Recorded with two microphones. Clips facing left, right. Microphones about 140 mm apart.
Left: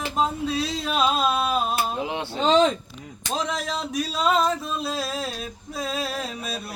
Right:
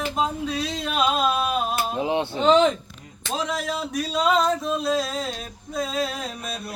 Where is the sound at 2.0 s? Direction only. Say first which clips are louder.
Right 5 dB; 20° right (ahead or behind).